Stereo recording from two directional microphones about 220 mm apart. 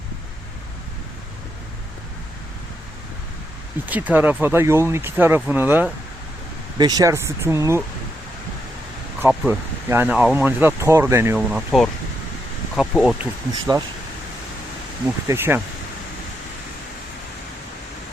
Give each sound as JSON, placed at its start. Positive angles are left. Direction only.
{"t": 3.8, "sound": "speech", "side_deg": -5}
{"t": 9.2, "sound": "speech", "side_deg": -10}
{"t": 13.5, "sound": "speech", "side_deg": -15}
{"t": 15.3, "sound": "speech", "side_deg": -10}